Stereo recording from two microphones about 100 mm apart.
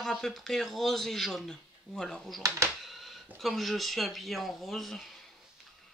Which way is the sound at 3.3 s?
Centre (ahead or behind).